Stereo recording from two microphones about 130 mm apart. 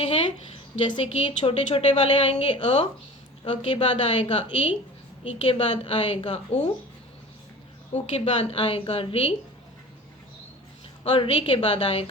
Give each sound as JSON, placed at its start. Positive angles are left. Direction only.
{"t": 0.8, "sound": "a woman's voice", "side_deg": 45}
{"t": 7.9, "sound": "a woman's voice", "side_deg": 50}
{"t": 11.0, "sound": "a woman's voice", "side_deg": 45}